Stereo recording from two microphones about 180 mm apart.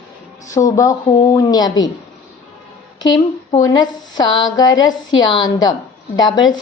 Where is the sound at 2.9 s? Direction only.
25° left (ahead or behind).